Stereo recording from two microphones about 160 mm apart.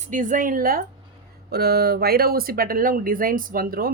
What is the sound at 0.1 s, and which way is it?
Speech, 55° right (ahead or behind).